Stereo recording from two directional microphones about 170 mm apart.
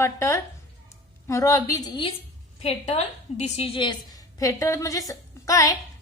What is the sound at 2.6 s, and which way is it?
A woman's voice, 40° left (ahead or behind).